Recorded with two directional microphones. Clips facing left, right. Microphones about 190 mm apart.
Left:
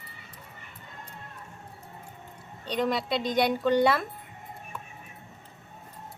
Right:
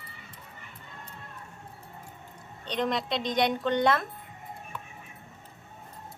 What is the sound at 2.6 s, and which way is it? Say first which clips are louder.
Speech: left 2 dB; 5° left (ahead or behind).